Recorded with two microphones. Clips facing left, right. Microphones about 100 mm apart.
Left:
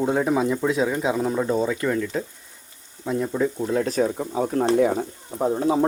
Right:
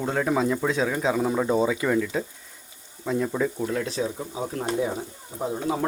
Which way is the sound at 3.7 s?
45° left (ahead or behind).